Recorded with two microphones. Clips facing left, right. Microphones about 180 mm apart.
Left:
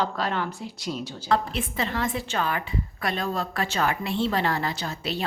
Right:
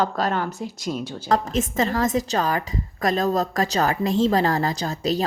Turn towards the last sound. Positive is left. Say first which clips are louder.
# right 7 dB
turn(degrees=-40)  # may be behind; listen again after turning